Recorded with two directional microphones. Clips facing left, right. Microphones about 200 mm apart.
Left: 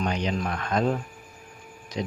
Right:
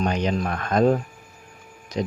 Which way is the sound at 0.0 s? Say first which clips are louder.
Right 4 dB; 50° right (ahead or behind).